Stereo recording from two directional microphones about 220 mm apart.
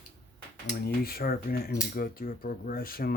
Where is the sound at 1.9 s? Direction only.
40° left (ahead or behind).